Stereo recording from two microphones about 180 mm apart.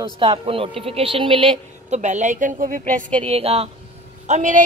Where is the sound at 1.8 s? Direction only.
40° right (ahead or behind).